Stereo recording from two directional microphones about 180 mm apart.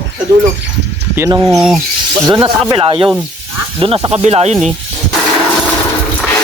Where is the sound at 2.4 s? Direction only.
25° right (ahead or behind).